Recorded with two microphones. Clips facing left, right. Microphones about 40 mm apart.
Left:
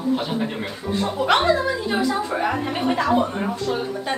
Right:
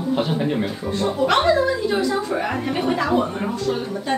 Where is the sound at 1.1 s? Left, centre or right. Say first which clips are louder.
Right 1 dB; centre.